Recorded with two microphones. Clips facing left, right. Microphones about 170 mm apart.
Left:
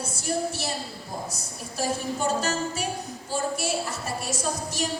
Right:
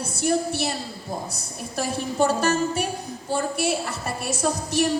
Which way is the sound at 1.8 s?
60° right (ahead or behind).